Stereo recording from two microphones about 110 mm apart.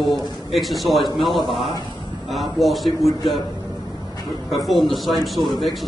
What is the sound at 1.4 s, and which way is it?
Speech, 55° left (ahead or behind).